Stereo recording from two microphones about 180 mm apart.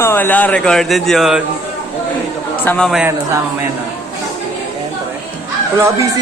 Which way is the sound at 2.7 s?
5° left (ahead or behind).